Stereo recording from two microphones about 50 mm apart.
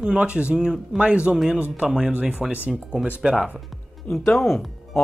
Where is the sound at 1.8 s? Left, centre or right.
Centre.